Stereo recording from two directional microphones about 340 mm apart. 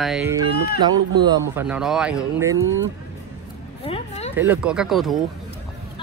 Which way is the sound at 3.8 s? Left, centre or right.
Centre.